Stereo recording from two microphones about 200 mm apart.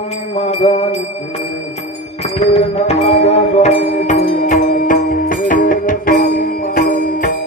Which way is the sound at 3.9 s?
40° left (ahead or behind).